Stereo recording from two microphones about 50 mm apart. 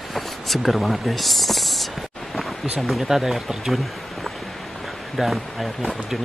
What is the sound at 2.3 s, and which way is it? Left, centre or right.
Speech, centre.